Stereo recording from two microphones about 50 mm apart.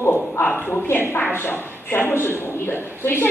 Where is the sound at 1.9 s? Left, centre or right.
Left.